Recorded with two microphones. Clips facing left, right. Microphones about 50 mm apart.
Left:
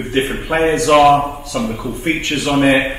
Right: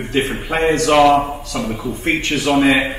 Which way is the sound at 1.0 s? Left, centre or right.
Centre.